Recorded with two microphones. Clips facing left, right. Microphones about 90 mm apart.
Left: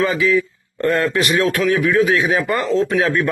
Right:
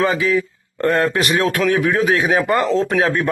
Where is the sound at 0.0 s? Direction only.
35° right (ahead or behind).